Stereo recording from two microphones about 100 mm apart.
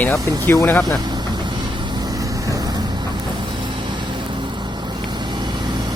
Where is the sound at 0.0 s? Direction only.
25° left (ahead or behind).